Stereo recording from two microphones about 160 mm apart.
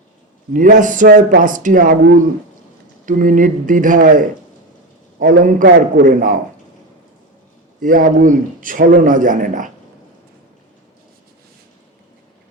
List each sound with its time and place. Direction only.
0.5 s a man's voice: 55° right (ahead or behind)
7.8 s a man's voice: 55° right (ahead or behind)